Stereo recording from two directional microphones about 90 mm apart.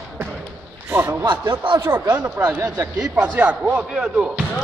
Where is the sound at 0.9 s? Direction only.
25° right (ahead or behind).